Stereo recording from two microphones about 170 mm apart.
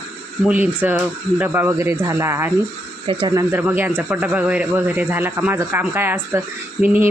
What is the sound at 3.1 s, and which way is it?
Speech, 25° right (ahead or behind).